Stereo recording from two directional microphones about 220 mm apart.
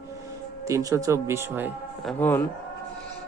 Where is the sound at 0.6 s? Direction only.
15° right (ahead or behind); by 2.4 s 10° left (ahead or behind).